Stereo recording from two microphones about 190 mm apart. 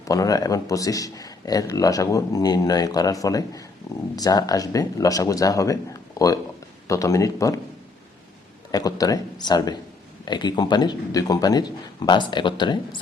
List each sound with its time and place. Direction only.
0.0 s a man's voice: 15° left (ahead or behind)
8.7 s speech: 20° left (ahead or behind)